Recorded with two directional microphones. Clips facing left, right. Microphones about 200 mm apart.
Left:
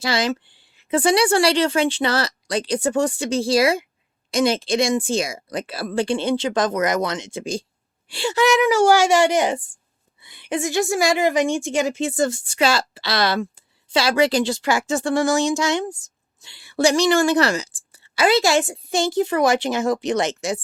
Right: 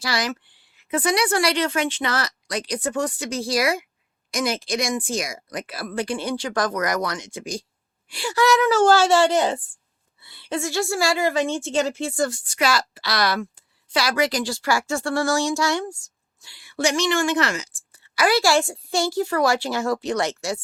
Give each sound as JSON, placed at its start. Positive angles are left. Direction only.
{"t": 0.0, "sound": "a woman's voice", "side_deg": 25}